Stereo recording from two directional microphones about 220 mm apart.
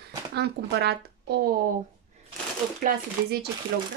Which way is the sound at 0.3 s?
50° right (ahead or behind).